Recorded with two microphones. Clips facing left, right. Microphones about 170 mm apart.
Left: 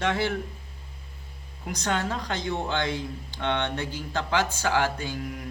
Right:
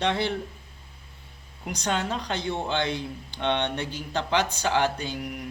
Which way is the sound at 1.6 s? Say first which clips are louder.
Even; 15° right (ahead or behind).